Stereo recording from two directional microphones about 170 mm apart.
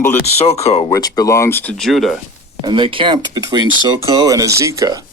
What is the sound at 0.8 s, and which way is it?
Speech, 20° left (ahead or behind).